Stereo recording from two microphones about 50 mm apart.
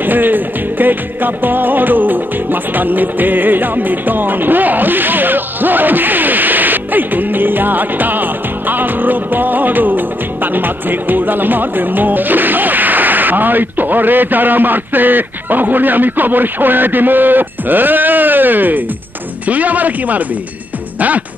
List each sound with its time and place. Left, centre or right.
0.0 s music: right
19.4 s speech: right